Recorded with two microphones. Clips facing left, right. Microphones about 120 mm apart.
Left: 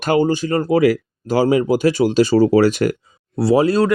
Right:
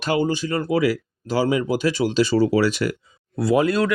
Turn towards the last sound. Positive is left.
turn(degrees=35)  # may be behind; listen again after turning